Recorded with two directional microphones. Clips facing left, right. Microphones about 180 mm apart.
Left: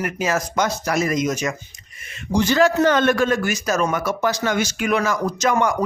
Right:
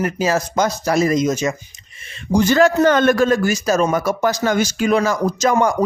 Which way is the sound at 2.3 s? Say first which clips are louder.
Right 3 dB; 45° right (ahead or behind).